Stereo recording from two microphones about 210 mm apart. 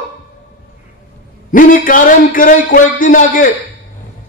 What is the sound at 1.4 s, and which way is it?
A man's voice, 40° left (ahead or behind).